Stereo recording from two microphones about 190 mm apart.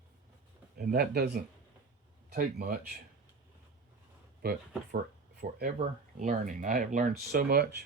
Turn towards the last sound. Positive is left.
turn(degrees=-60)  # may be behind; listen again after turning